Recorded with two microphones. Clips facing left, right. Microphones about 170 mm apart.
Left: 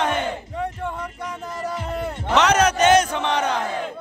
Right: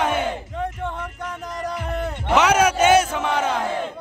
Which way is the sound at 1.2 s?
5° left (ahead or behind).